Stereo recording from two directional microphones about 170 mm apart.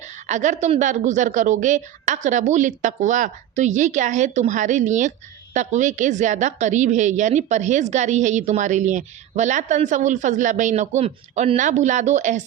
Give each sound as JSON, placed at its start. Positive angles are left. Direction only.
{"t": 0.0, "sound": "a woman's voice", "side_deg": -45}